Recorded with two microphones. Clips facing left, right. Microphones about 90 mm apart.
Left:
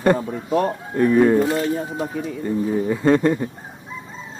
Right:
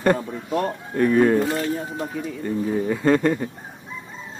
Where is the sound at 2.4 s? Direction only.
Centre (ahead or behind).